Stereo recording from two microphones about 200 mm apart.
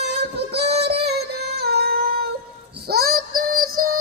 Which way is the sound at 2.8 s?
50° right (ahead or behind).